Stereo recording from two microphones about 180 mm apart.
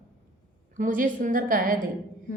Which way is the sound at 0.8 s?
45° right (ahead or behind).